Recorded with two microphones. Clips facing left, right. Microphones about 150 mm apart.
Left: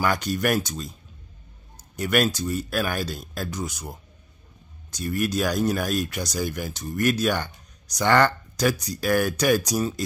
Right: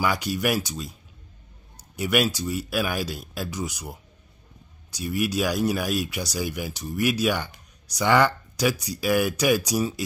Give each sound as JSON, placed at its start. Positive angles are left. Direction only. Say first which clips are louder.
{"t": 0.0, "sound": "speech", "louder": "left 1 dB", "side_deg": -10}
{"t": 2.0, "sound": "speech", "louder": "left 1 dB", "side_deg": -10}